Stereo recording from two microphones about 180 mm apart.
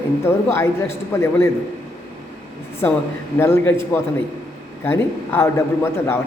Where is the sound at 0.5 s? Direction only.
15° left (ahead or behind).